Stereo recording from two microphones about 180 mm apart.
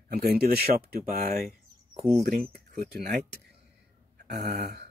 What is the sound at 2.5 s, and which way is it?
Speech, 60° right (ahead or behind).